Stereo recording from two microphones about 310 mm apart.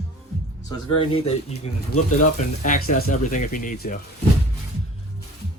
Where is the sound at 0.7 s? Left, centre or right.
Centre.